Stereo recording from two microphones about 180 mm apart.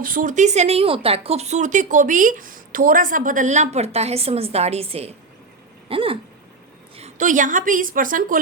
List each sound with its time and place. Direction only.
0.0 s speech: 50° right (ahead or behind); by 6.1 s 30° right (ahead or behind)
6.9 s a woman's voice: 40° right (ahead or behind)